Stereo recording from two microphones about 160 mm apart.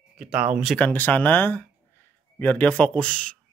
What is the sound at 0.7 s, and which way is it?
Speech, 10° left (ahead or behind).